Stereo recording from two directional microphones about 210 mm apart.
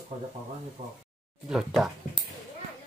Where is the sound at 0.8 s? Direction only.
30° right (ahead or behind).